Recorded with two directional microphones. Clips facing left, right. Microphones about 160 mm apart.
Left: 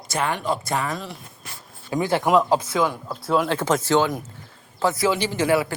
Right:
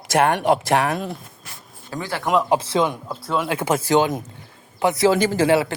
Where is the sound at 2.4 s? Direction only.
30° right (ahead or behind).